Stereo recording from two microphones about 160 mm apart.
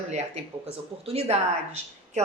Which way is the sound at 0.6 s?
40° right (ahead or behind).